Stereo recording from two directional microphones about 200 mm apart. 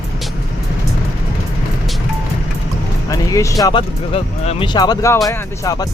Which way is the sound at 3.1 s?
15° left (ahead or behind).